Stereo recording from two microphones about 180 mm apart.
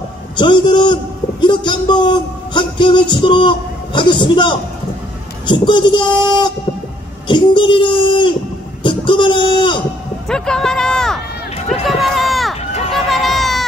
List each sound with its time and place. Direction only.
0.4 s a man's voice: 25° left (ahead or behind)
8.8 s a sound: 25° left (ahead or behind)
10.2 s speech: 5° left (ahead or behind)
11.8 s run: centre (ahead or behind)